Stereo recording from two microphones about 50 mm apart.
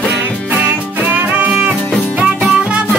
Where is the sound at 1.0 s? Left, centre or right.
Right.